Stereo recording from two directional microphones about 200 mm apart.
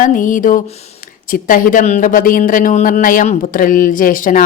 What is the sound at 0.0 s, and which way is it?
Speech, 40° left (ahead or behind).